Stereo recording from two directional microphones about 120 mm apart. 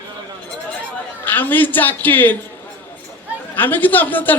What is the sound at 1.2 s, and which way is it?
A man's voice, 15° left (ahead or behind).